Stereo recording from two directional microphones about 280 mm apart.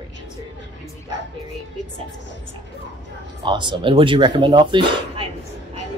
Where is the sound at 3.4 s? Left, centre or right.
Centre.